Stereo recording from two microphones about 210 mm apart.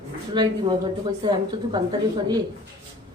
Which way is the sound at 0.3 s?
20° right (ahead or behind).